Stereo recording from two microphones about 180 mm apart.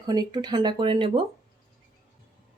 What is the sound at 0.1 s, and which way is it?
Speech, 25° right (ahead or behind).